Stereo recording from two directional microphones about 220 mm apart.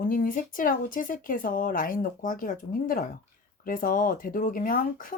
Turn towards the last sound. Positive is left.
turn(degrees=40)  # may be behind; listen again after turning